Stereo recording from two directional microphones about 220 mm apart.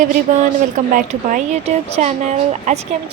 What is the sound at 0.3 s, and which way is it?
Speech, 35° right (ahead or behind).